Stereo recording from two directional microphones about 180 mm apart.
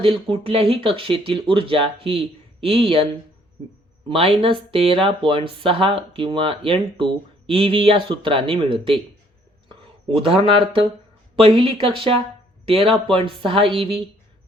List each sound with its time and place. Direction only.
0.0 s a man's voice: 30° right (ahead or behind)